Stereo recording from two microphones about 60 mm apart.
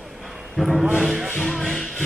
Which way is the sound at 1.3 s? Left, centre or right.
Centre.